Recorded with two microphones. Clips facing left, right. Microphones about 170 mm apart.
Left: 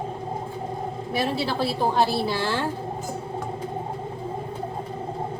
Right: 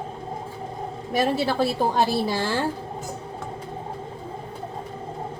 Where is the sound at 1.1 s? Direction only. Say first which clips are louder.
Right 4 dB; 45° right (ahead or behind).